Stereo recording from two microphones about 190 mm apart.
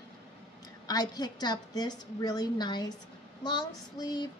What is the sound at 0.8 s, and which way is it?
Speech, 20° left (ahead or behind).